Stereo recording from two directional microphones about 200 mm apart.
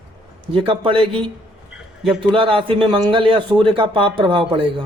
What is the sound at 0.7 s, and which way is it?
Speech, 25° right (ahead or behind).